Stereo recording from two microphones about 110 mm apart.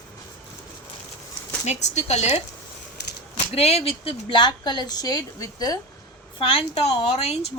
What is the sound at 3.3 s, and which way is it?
Speech, 70° left (ahead or behind).